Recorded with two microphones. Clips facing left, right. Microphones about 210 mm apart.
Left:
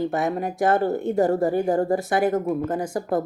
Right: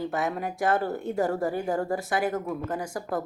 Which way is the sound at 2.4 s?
40° left (ahead or behind).